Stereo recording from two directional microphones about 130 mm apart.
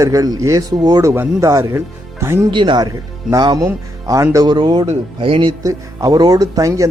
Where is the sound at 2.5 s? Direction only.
35° right (ahead or behind).